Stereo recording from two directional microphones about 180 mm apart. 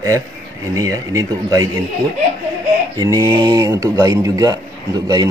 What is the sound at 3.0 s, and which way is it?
Speech, 15° right (ahead or behind).